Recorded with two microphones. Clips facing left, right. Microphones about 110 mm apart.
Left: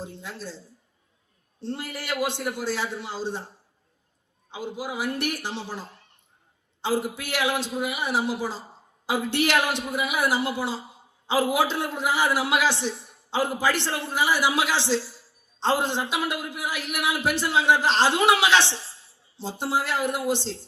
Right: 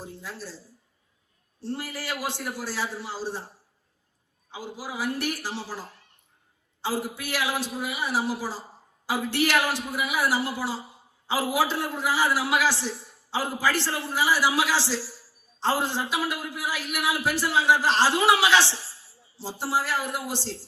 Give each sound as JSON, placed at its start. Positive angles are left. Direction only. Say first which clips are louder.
{"t": 0.0, "sound": "a woman's voice", "louder": "left 2 dB", "side_deg": 20}
{"t": 4.5, "sound": "a man's voice", "louder": "left 3 dB", "side_deg": 20}